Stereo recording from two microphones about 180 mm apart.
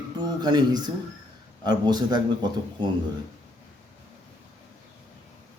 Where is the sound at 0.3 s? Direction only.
25° right (ahead or behind).